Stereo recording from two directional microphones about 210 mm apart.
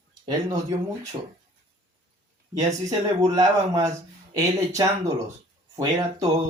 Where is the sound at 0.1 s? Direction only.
20° right (ahead or behind).